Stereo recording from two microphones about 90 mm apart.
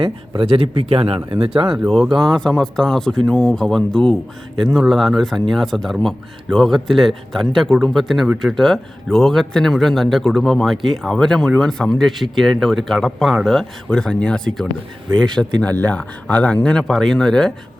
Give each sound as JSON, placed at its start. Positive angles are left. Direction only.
{"t": 0.0, "sound": "speech", "side_deg": -80}
{"t": 2.1, "sound": "a man's voice", "side_deg": 5}